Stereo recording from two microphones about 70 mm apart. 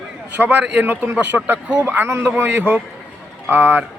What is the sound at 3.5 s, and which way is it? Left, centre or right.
Speech, right.